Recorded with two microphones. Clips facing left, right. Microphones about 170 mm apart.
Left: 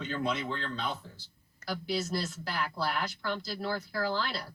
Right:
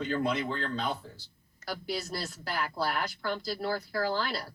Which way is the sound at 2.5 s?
50° right (ahead or behind).